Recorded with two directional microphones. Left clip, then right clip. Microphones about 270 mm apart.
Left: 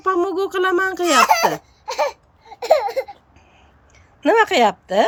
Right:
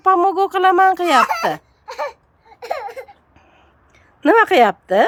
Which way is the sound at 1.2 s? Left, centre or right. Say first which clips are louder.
Left 3 dB; left.